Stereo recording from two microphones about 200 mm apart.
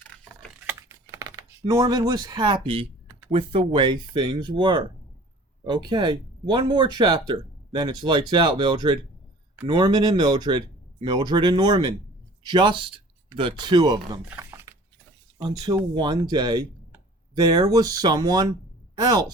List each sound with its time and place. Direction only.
0.7 s typing: 15° right (ahead or behind)
3.3 s speech: 30° right (ahead or behind)
14.3 s a sound: 10° right (ahead or behind)
15.4 s speech: 20° right (ahead or behind)